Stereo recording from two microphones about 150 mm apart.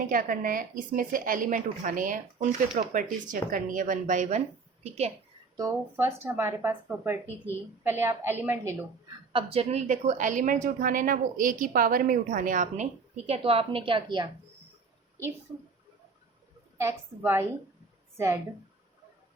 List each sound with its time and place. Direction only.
0.1 s a woman's voice: 65° right (ahead or behind); by 5.1 s 45° right (ahead or behind)
5.5 s speech: 20° right (ahead or behind)
9.3 s a woman's voice: 40° right (ahead or behind)
16.7 s speech: 15° right (ahead or behind)